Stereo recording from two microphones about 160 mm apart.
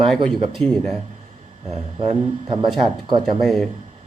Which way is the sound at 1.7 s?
35° right (ahead or behind).